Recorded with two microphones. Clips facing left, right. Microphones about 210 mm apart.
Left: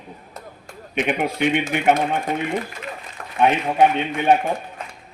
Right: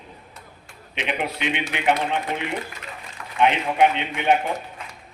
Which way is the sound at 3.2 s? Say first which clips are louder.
Left 2 dB; 45° left (ahead or behind).